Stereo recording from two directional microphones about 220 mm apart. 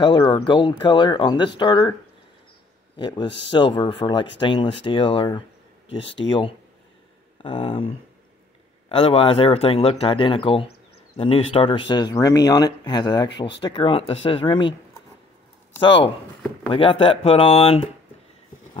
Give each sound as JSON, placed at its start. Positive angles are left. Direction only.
{"t": 0.0, "sound": "speech", "side_deg": 20}
{"t": 3.0, "sound": "speech", "side_deg": 20}
{"t": 8.8, "sound": "speech", "side_deg": 25}
{"t": 16.6, "sound": "speech", "side_deg": 25}